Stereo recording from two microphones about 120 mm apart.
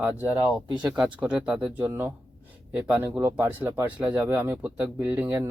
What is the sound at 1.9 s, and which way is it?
Speech, 20° right (ahead or behind).